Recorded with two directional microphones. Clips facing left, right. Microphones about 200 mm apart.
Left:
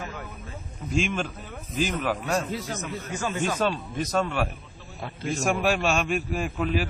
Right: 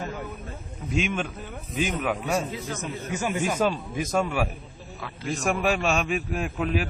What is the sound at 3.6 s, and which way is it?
A man's voice, 5° right (ahead or behind).